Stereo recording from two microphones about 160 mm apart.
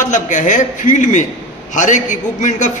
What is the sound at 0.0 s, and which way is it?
A man's voice, 50° left (ahead or behind).